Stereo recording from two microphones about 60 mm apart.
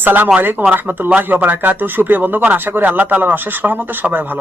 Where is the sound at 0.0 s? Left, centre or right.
Right.